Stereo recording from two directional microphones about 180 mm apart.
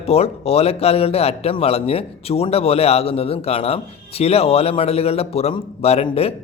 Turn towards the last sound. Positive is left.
turn(degrees=35)  # may be behind; listen again after turning